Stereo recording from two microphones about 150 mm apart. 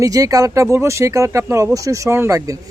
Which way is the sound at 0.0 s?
20° right (ahead or behind).